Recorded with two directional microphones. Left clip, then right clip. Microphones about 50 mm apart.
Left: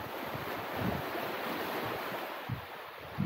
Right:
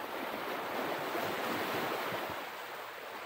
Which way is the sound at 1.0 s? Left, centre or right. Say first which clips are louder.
Right 1 dB; right.